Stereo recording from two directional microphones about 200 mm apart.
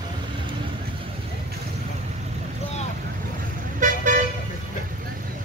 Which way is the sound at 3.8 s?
40° right (ahead or behind).